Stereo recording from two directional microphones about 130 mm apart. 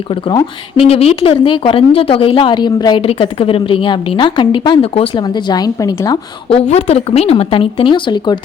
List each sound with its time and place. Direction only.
0.8 s a woman's voice: 50° left (ahead or behind)
5.2 s a woman's voice: 35° left (ahead or behind)
6.5 s a woman's voice: 50° left (ahead or behind); by 8.4 s 35° left (ahead or behind)